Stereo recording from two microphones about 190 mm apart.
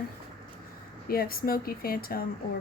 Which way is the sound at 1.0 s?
50° left (ahead or behind).